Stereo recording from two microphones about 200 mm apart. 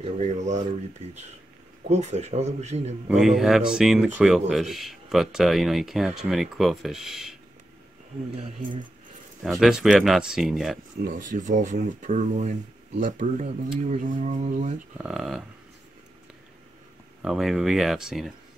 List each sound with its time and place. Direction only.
0.0 s speech: 35° right (ahead or behind)
3.1 s speech: centre (ahead or behind)
9.4 s speech: centre (ahead or behind)
11.0 s speech: 40° right (ahead or behind)
15.0 s speech: centre (ahead or behind)
17.2 s speech: centre (ahead or behind)